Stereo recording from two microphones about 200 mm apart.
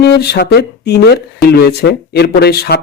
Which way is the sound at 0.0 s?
55° left (ahead or behind).